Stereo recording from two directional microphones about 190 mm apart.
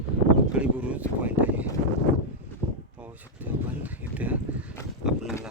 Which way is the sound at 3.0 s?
10° right (ahead or behind).